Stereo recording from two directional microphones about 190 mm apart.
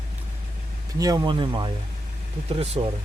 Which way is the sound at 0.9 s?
20° right (ahead or behind).